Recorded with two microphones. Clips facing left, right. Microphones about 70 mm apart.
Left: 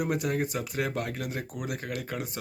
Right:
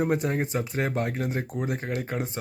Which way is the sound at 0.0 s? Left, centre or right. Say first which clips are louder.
Right 3 dB; right.